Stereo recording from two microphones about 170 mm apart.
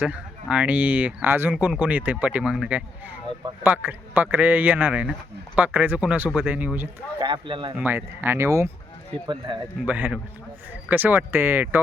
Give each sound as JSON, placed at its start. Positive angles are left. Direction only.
{"t": 0.0, "sound": "speech", "side_deg": -5}
{"t": 7.2, "sound": "speech", "side_deg": -30}
{"t": 7.8, "sound": "speech", "side_deg": -10}
{"t": 9.8, "sound": "speech", "side_deg": -10}